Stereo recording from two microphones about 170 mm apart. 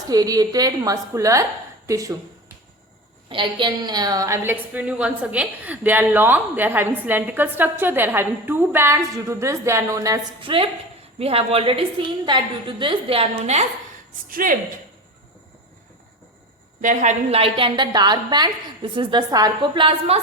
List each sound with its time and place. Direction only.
0.1 s a woman's voice: 20° right (ahead or behind)
3.2 s a woman's voice: 30° right (ahead or behind)
11.2 s a woman's voice: 35° right (ahead or behind)
14.3 s speech: 55° right (ahead or behind)
16.8 s a woman's voice: 45° right (ahead or behind); by 20.1 s 30° right (ahead or behind)